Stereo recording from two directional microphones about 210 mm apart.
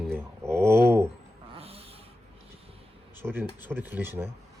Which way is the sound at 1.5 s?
30° right (ahead or behind).